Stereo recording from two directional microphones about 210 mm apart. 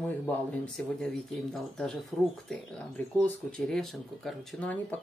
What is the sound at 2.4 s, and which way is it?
Speech, 5° left (ahead or behind).